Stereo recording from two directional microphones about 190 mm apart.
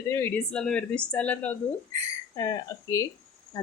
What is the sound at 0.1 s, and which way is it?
Speech, 10° left (ahead or behind).